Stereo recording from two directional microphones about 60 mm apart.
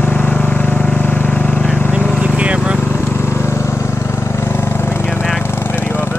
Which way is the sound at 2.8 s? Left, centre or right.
Left.